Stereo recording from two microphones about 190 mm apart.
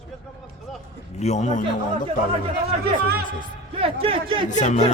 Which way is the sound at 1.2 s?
35° left (ahead or behind).